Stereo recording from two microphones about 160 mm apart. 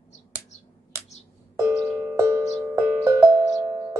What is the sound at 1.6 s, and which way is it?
Music, 15° right (ahead or behind).